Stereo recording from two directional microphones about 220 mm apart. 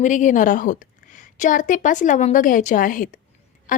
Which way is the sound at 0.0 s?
35° left (ahead or behind).